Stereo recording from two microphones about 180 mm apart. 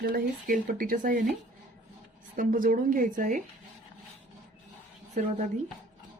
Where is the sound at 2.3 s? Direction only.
50° right (ahead or behind).